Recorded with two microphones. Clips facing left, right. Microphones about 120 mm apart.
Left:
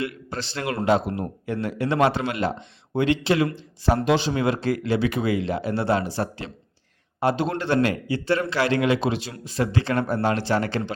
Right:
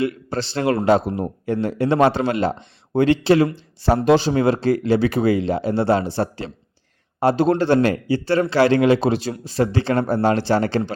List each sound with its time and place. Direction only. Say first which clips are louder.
0.0 s speech: right 7 dB; 30° right (ahead or behind)